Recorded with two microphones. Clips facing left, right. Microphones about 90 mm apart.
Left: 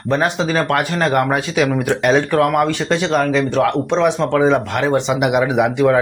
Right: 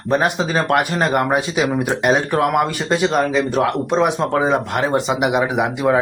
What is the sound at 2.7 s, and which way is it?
Speech, 10° right (ahead or behind).